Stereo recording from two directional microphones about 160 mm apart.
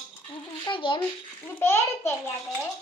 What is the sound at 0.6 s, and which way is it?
Speech, 30° left (ahead or behind).